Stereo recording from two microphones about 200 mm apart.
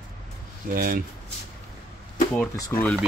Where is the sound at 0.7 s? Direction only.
45° right (ahead or behind).